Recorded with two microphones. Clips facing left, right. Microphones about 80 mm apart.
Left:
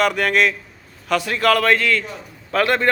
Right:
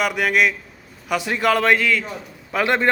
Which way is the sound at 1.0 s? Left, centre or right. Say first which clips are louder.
Left 2 dB; centre.